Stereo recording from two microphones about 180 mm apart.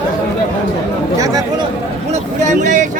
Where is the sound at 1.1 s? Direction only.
20° right (ahead or behind).